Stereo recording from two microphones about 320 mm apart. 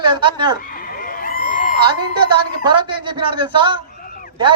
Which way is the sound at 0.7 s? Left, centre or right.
Left.